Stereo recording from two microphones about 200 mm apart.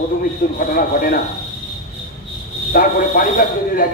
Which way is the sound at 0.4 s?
50° left (ahead or behind).